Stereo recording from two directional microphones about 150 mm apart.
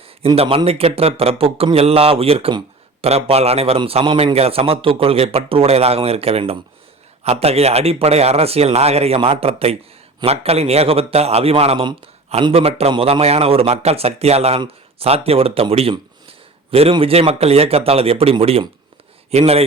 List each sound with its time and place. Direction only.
0.3 s a man's voice: 40° right (ahead or behind)